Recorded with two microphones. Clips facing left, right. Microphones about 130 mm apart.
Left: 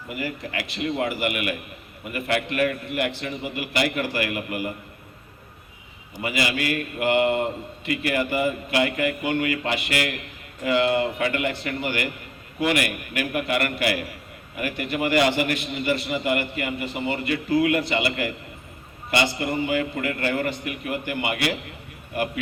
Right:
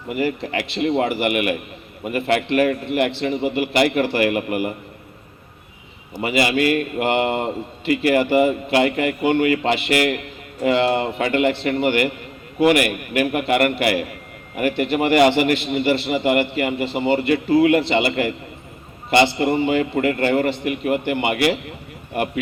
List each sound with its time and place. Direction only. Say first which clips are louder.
0.1 s a man's voice: right 8 dB; 25° right (ahead or behind)
6.2 s a man's voice: right 7 dB; 30° right (ahead or behind)